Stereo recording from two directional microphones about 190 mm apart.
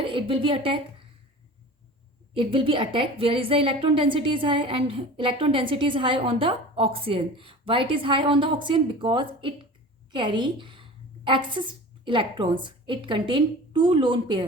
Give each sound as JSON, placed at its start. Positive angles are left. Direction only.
{"t": 0.0, "sound": "a woman's voice", "side_deg": -30}
{"t": 2.3, "sound": "a woman's voice", "side_deg": -25}